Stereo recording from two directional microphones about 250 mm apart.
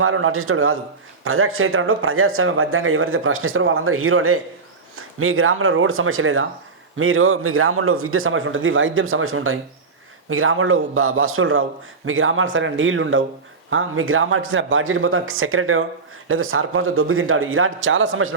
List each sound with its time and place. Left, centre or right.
0.0 s a man's voice: right